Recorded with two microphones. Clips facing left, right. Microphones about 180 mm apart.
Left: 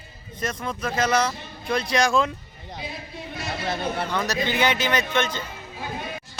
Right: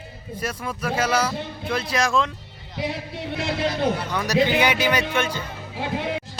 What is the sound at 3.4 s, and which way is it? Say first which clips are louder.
Speech: right 5 dB; 65° right (ahead or behind).